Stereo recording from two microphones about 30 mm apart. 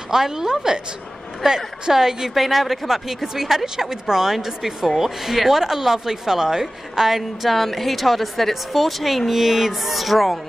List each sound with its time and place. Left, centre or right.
0.1 s a woman's voice: centre
2.3 s speech: centre
7.4 s a woman's voice: centre